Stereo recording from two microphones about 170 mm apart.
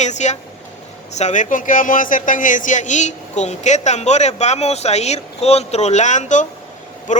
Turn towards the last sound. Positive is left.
turn(degrees=45)  # may be behind; listen again after turning